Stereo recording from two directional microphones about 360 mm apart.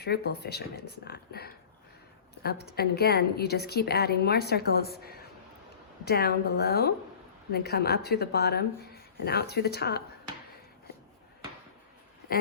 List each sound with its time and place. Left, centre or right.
0.0 s a woman's voice: left